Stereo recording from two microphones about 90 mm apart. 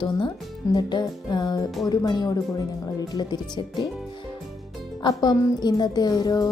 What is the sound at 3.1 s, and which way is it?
Speech, 55° left (ahead or behind).